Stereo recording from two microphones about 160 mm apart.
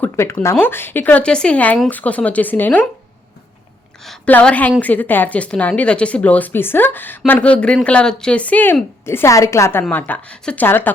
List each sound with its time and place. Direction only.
0.0 s speech: 15° left (ahead or behind)
4.0 s speech: 5° left (ahead or behind)